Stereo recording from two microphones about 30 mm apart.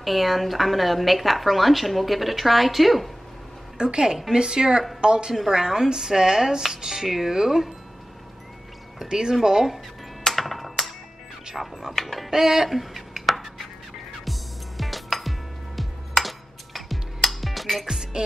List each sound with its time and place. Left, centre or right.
0.0 s a woman's voice: centre
3.7 s a woman's voice: right; by 7.7 s centre
9.0 s speech: centre
10.2 s coin: centre
11.6 s a woman's voice: centre
11.9 s speech: centre
12.3 s speech: centre
12.6 s a sound: centre
14.8 s music: centre
17.8 s music: centre